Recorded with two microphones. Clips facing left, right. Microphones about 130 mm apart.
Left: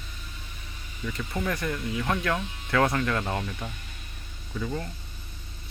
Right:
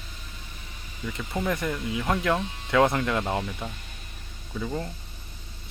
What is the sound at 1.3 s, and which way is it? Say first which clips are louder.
Speech: right 2 dB; 20° right (ahead or behind).